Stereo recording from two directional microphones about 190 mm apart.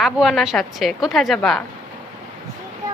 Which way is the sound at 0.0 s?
Centre (ahead or behind).